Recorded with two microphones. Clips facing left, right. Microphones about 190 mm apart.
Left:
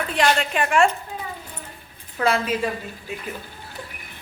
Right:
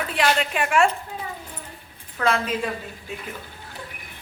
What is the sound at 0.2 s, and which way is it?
Speech, 5° right (ahead or behind).